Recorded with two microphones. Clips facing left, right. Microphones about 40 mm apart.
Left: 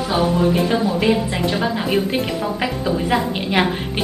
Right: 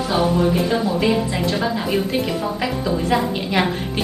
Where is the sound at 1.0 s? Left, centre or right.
Centre.